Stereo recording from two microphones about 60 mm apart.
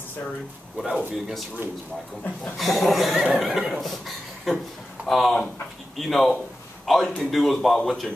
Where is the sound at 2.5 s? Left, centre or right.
Centre.